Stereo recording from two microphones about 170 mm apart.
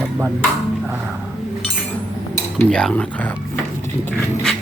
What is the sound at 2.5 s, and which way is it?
Speech, 5° left (ahead or behind).